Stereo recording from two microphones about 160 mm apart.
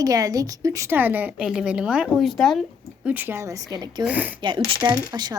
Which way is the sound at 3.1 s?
15° right (ahead or behind).